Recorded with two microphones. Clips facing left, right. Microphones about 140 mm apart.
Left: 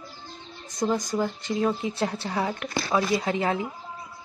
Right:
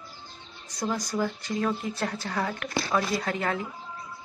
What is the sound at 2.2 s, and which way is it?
Speech, 15° left (ahead or behind).